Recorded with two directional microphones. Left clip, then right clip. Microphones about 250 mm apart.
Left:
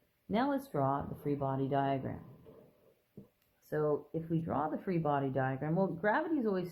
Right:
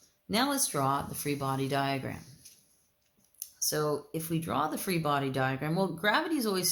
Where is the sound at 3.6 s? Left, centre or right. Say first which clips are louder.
Right 3 dB; right.